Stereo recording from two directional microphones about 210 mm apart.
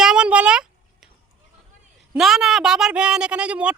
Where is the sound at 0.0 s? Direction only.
5° right (ahead or behind).